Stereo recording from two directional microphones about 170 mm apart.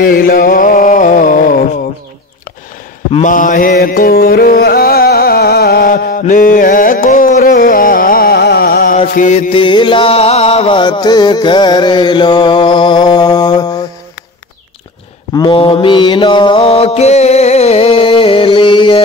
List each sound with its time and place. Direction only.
0.0 s a sound: 60° left (ahead or behind)
3.1 s mantra: 45° left (ahead or behind)
3.7 s music: 60° left (ahead or behind)
9.5 s music: 30° left (ahead or behind)
15.3 s mantra: 30° left (ahead or behind)